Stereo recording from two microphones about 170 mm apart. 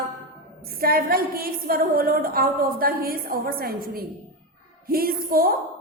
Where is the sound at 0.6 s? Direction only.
60° right (ahead or behind).